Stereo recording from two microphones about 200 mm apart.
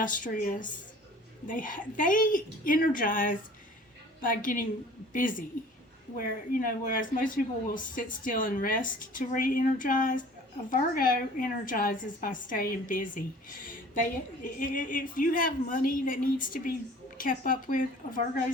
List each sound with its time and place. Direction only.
0.0 s a woman's voice: 40° left (ahead or behind)
6.1 s speech: 45° left (ahead or behind)
14.4 s speech: 40° left (ahead or behind)